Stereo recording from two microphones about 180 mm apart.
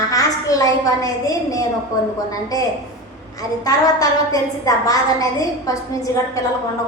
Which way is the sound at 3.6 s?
20° left (ahead or behind).